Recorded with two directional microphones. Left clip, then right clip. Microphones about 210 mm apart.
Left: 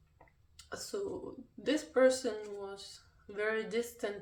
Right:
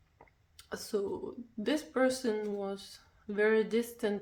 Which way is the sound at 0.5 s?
40° right (ahead or behind).